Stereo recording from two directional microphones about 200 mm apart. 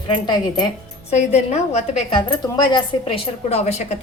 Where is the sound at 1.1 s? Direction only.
35° left (ahead or behind).